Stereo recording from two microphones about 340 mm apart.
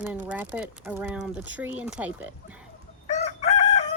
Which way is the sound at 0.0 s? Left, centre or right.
Centre.